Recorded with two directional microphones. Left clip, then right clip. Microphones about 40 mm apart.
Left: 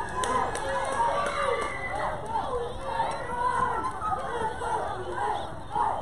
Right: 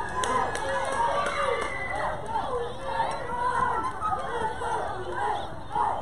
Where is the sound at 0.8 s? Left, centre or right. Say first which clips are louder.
Even; right.